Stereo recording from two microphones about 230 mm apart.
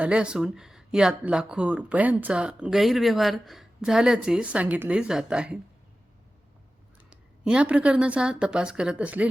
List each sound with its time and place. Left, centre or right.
0.0 s speech: centre
7.1 s speech: centre